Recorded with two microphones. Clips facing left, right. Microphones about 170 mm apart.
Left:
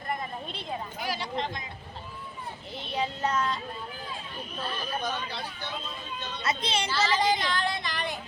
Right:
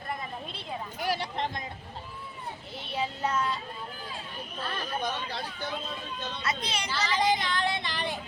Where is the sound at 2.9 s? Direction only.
5° right (ahead or behind).